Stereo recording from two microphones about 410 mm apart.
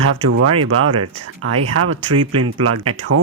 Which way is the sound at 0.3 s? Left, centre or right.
Right.